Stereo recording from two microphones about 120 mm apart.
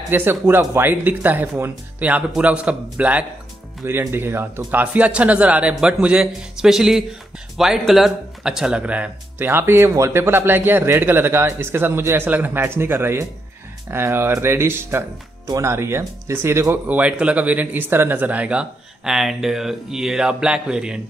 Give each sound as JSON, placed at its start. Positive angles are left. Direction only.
{"t": 0.1, "sound": "speech", "side_deg": -15}